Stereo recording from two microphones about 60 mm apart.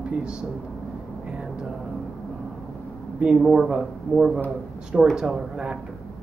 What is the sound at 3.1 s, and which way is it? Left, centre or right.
Speech, centre.